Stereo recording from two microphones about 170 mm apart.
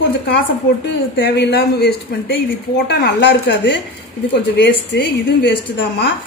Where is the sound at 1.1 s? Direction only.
85° left; by 2.4 s 70° left (ahead or behind).